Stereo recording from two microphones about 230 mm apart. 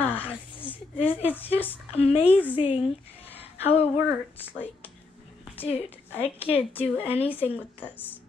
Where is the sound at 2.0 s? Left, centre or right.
Left.